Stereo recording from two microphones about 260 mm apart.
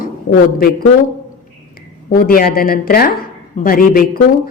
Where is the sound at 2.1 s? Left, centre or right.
Left.